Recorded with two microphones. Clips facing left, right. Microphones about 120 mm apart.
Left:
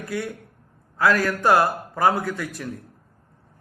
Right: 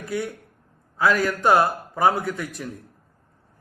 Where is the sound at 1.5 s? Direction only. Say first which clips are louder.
Even; centre (ahead or behind).